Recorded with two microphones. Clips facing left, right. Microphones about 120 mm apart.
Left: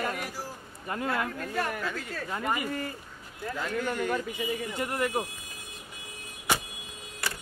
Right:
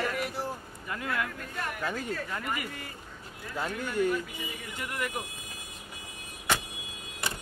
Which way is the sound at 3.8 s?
50° left (ahead or behind).